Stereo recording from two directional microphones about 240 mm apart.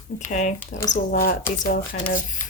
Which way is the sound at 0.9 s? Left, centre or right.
Left.